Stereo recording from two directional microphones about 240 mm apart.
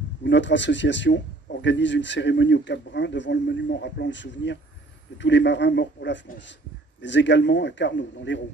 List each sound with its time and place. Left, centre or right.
0.2 s a man's voice: left